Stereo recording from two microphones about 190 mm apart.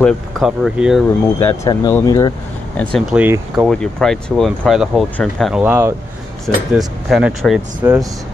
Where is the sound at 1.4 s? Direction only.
15° left (ahead or behind).